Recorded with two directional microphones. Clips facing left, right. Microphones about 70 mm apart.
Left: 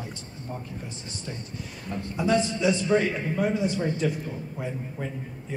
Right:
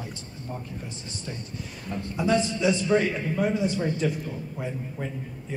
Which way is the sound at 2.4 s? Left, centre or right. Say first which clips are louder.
Even; left.